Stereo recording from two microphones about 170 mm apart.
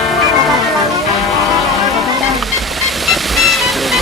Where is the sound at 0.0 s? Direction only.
Centre (ahead or behind).